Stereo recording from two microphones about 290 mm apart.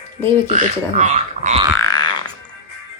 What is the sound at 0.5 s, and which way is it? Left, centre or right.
Speech, right.